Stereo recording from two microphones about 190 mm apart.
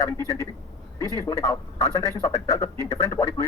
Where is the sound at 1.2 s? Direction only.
15° left (ahead or behind).